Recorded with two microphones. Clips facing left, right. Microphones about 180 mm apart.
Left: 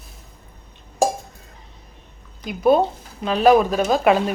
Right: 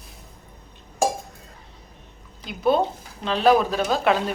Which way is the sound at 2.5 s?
50° left (ahead or behind).